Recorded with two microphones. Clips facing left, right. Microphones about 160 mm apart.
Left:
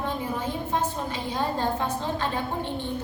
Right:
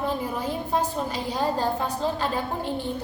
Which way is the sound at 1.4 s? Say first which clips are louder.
Right 1 dB; 35° right (ahead or behind).